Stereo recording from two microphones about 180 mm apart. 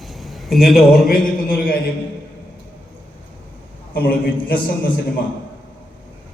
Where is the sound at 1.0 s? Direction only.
55° left (ahead or behind).